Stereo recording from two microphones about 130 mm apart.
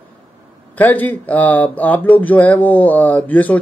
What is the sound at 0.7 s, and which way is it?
Speech, 10° left (ahead or behind).